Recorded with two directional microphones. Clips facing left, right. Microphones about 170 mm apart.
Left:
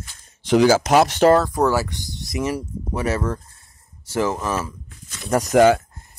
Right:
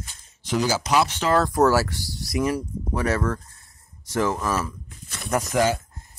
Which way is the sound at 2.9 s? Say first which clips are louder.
Left 1 dB; 25° left (ahead or behind).